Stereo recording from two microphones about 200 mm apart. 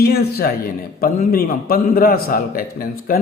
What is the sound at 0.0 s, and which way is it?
A man's voice, 50° left (ahead or behind).